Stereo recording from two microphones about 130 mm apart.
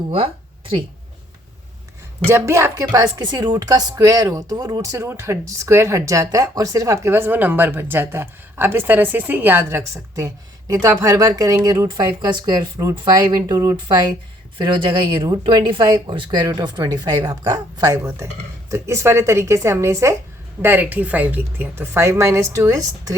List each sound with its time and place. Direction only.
0.1 s speech: 45° right (ahead or behind)
2.2 s a woman's voice: 20° right (ahead or behind)